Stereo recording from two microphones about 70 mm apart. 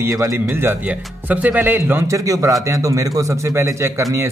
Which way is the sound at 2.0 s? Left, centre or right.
Right.